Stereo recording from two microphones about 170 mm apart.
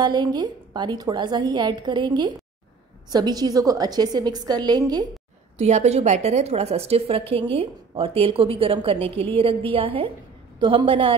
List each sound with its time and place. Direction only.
0.0 s a woman's voice: 25° right (ahead or behind)
5.6 s a woman's voice: 40° right (ahead or behind)